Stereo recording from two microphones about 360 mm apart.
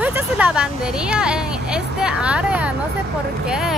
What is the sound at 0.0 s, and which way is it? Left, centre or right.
Speech, centre.